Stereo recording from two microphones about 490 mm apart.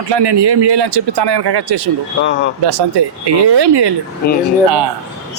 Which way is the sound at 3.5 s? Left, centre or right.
Right.